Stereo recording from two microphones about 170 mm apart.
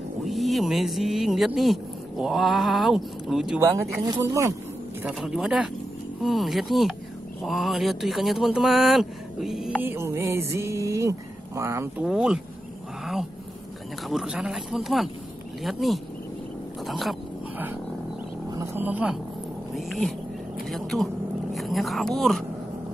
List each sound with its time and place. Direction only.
0.2 s speech: centre (ahead or behind)
4.0 s speech: 20° right (ahead or behind)
5.0 s speech: 5° right (ahead or behind)
9.8 s speech: 15° right (ahead or behind)
12.1 s speech: 5° right (ahead or behind)
13.0 s a sound: centre (ahead or behind)
14.0 s speech: 5° right (ahead or behind)
18.5 s wild animals: 15° right (ahead or behind)
19.7 s a woman's voice: centre (ahead or behind)